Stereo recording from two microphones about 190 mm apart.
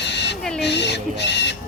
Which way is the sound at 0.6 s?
65° left (ahead or behind).